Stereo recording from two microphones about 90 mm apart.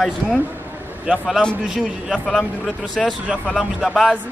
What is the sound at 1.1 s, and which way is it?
Speech, 10° right (ahead or behind).